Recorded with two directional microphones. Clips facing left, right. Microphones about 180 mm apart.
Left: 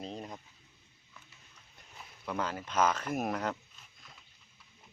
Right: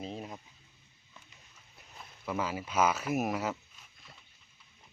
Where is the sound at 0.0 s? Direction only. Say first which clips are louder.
Right 1 dB; 5° right (ahead or behind).